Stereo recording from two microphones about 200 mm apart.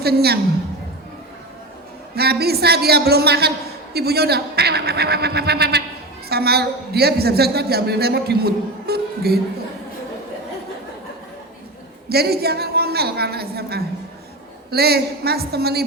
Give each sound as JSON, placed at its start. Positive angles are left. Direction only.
{"t": 0.0, "sound": "a woman's voice", "side_deg": -50}
{"t": 2.1, "sound": "a woman's voice", "side_deg": -50}
{"t": 12.0, "sound": "a woman's voice", "side_deg": -50}